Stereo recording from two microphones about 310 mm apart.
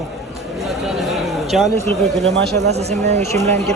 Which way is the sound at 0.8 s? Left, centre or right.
Centre.